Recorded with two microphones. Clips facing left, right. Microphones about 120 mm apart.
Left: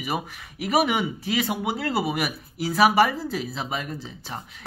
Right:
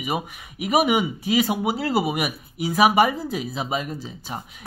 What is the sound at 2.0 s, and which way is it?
Speech, 15° right (ahead or behind).